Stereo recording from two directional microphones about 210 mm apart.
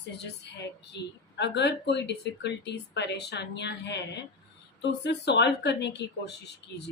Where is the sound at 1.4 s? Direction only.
55° left (ahead or behind).